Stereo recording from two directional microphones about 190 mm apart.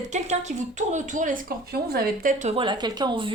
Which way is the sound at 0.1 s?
40° right (ahead or behind).